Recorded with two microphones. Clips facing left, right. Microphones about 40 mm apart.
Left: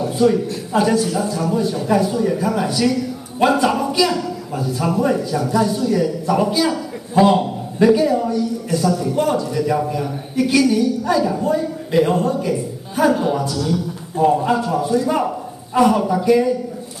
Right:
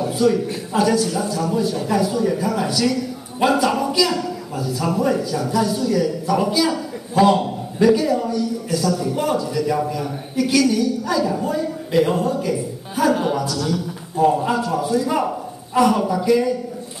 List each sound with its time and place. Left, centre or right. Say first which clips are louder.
0.2 s a man's voice: left 2 dB; centre
4.9 s a man's voice: left 1 dB; centre
9.1 s a man's voice: left 3 dB; centre
9.5 s a man's voice: left 2 dB; centre
12.1 s a man's voice: left 2 dB; centre
12.4 s a woman's voice: left 1 dB; centre
13.1 s a man's voice: left 1 dB; centre